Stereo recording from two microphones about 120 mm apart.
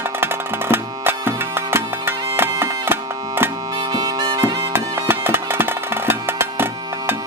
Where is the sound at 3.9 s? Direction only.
35° right (ahead or behind).